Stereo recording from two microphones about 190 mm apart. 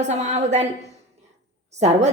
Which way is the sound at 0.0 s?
35° right (ahead or behind).